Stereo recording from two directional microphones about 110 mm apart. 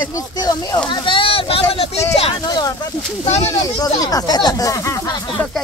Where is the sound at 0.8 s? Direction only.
50° left (ahead or behind).